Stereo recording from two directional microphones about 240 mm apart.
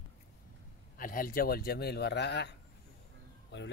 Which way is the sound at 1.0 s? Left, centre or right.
Left.